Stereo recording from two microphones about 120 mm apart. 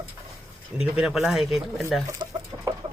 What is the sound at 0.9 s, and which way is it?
Speech, 5° right (ahead or behind).